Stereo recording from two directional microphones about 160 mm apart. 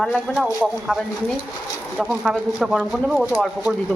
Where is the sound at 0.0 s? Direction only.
Centre (ahead or behind).